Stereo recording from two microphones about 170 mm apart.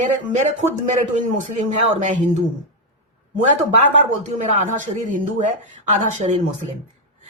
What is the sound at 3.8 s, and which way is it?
Speech, 45° right (ahead or behind).